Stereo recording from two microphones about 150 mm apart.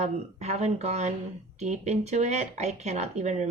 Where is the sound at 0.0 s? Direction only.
45° right (ahead or behind).